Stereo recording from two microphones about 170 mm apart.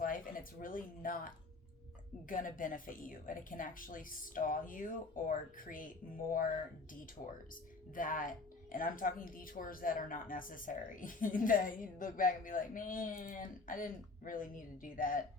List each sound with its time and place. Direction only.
0.0 s speech: 55° left (ahead or behind)
2.3 s a woman's voice: 50° left (ahead or behind)
7.2 s speech: 35° left (ahead or behind)
7.9 s a woman's voice: 55° left (ahead or behind)